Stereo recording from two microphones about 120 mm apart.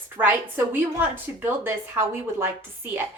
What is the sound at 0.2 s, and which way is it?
A woman's voice, 15° right (ahead or behind).